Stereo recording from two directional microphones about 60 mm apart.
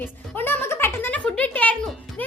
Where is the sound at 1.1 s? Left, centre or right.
Left.